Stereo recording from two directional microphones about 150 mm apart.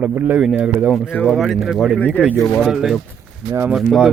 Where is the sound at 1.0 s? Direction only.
10° left (ahead or behind).